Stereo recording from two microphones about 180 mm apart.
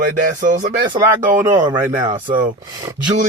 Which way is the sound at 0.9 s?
30° right (ahead or behind).